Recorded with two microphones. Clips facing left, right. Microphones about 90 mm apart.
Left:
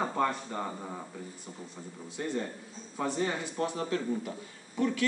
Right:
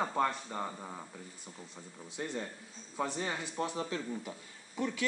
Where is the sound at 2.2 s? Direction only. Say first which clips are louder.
Left 5 dB; 10° right (ahead or behind).